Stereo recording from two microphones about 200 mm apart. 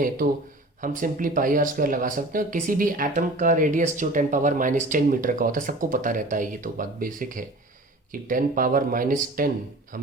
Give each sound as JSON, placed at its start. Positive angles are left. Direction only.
{"t": 0.8, "sound": "speech", "side_deg": -40}